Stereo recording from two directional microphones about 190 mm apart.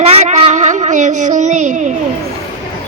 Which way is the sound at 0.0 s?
35° right (ahead or behind).